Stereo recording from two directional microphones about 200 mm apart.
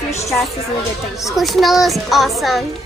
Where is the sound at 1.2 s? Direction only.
Centre (ahead or behind).